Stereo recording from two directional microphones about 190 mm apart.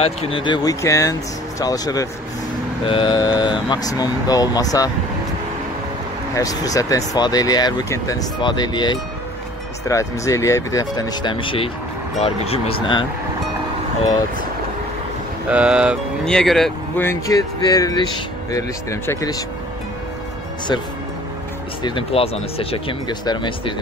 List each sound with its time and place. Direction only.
0.0 s speech: 30° left (ahead or behind)
6.3 s speech: 20° left (ahead or behind)
15.5 s speech: 5° right (ahead or behind)
17.0 s speech: 15° left (ahead or behind)
21.8 s speech: 30° left (ahead or behind)